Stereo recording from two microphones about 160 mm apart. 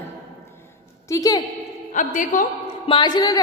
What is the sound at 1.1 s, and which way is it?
Speech, 20° left (ahead or behind).